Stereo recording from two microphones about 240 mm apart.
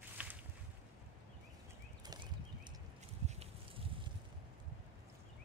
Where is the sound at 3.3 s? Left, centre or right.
Right.